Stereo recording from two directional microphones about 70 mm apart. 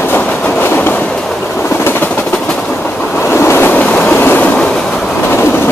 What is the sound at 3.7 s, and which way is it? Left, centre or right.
Train, centre.